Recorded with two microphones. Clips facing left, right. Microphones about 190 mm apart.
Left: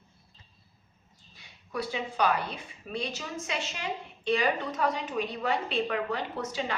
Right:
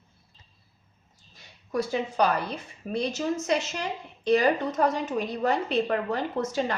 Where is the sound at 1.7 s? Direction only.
45° right (ahead or behind).